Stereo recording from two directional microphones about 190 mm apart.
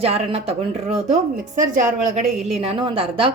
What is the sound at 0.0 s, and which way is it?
A woman's voice, 30° right (ahead or behind).